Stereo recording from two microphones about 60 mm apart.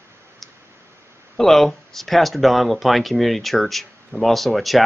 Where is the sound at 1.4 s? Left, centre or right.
Centre.